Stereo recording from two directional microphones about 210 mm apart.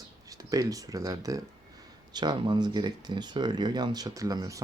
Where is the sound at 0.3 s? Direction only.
15° right (ahead or behind).